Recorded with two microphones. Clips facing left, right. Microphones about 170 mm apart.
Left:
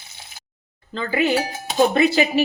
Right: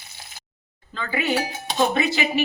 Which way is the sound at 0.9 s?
30° left (ahead or behind).